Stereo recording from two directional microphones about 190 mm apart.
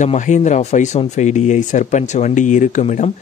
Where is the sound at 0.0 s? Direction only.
40° left (ahead or behind).